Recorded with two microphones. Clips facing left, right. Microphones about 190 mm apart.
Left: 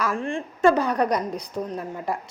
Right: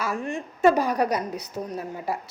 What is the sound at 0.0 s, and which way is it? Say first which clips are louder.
A woman's voice: left 2 dB; 10° right (ahead or behind).